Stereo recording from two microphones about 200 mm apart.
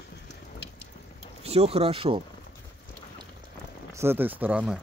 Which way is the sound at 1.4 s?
30° right (ahead or behind).